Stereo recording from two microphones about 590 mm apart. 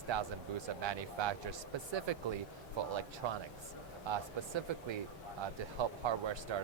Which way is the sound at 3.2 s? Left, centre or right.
Right.